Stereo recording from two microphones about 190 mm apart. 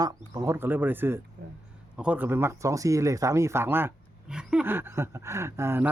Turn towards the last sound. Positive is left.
turn(degrees=-15)  # may be behind; listen again after turning